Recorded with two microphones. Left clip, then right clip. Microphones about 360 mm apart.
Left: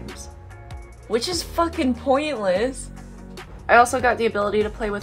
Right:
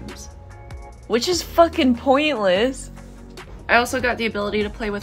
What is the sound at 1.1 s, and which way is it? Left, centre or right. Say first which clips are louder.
A woman's voice: right 6 dB; centre.